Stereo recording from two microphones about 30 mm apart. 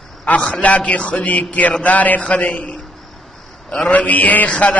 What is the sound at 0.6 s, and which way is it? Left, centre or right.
A man's voice, left.